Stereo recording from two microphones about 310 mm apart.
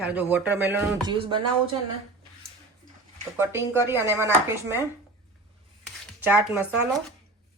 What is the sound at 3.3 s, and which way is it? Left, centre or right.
Speech, centre.